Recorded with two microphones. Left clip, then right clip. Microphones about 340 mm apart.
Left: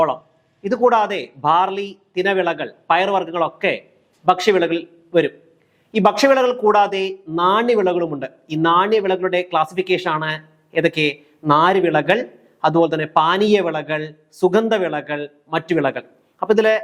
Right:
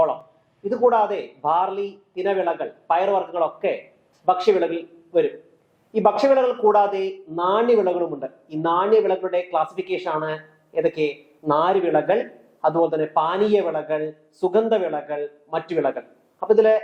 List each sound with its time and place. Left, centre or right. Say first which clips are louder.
0.7 s a man's voice: left 3 dB; left